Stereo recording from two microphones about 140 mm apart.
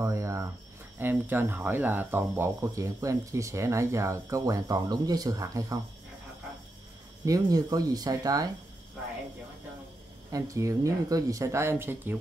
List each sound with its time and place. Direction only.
0.0 s cricket: 20° right (ahead or behind)
0.9 s speech: 15° right (ahead or behind)
7.2 s speech: 25° right (ahead or behind)
10.3 s speech: 25° right (ahead or behind)